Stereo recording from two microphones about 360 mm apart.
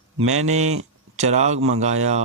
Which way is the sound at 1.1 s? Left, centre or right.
Centre.